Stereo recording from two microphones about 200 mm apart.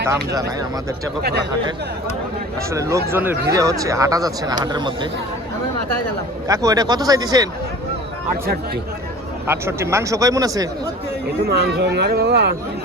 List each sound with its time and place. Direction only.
1.2 s speech: 55° right (ahead or behind)
2.6 s speech: 15° right (ahead or behind)
6.5 s speech: 15° right (ahead or behind)
9.5 s speech: 15° right (ahead or behind)
11.4 s speech: 55° right (ahead or behind)